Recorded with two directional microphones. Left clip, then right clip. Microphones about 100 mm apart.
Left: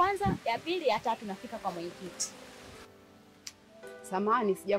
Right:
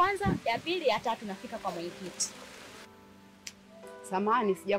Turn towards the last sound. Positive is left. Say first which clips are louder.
# right 1 dB
turn(degrees=0)  # may be behind; listen again after turning